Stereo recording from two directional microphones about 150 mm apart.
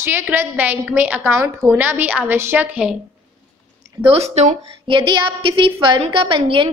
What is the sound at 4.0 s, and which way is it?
Speech, 40° right (ahead or behind).